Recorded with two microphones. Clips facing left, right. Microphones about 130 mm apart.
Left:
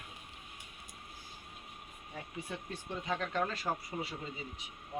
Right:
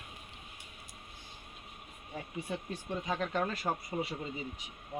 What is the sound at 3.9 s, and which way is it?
Speech, 30° right (ahead or behind).